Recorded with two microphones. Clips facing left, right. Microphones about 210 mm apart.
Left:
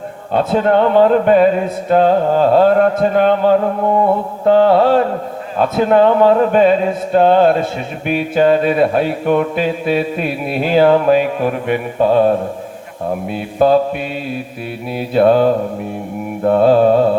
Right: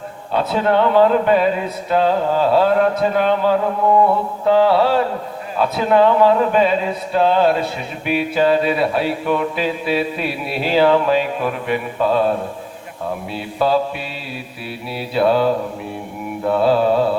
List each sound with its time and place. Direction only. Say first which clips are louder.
0.3 s speech: left 4 dB; 45° left (ahead or behind)
14.9 s speech: left 5 dB; 45° left (ahead or behind)